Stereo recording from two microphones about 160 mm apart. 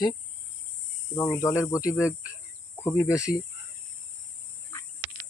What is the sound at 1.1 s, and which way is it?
Speech, 20° left (ahead or behind).